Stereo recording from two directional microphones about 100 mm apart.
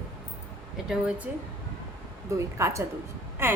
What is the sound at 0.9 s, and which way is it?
Speech, 10° right (ahead or behind).